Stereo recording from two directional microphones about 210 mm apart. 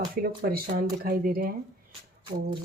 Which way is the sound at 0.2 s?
45° right (ahead or behind).